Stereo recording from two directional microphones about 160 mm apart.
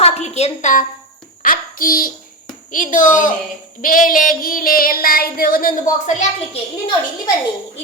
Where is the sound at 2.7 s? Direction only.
55° left (ahead or behind).